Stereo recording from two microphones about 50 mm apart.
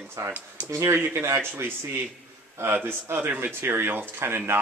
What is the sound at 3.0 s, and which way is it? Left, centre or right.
Speech, right.